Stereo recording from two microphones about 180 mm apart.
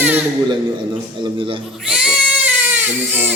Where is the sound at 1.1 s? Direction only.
30° right (ahead or behind).